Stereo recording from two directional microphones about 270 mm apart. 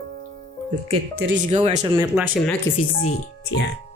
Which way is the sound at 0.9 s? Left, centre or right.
Right.